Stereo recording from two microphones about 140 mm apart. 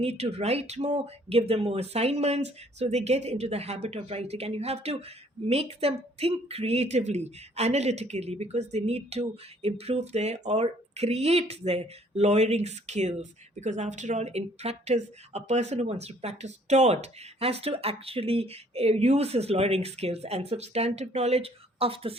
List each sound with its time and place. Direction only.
0.0 s speech: 45° right (ahead or behind)